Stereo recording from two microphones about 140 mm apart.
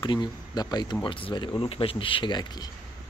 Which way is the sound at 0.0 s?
35° left (ahead or behind).